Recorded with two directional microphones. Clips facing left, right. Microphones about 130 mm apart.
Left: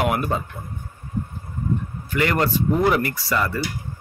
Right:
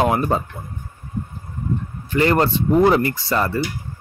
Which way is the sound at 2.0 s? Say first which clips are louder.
Right 4 dB; 30° right (ahead or behind).